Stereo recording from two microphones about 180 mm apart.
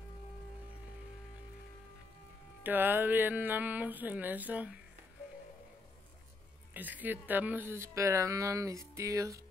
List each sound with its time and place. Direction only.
2.6 s speech: 10° right (ahead or behind)
6.7 s speech: 10° right (ahead or behind)